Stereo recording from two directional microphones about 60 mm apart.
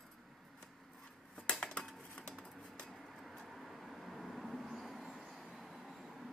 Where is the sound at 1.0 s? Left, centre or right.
Centre.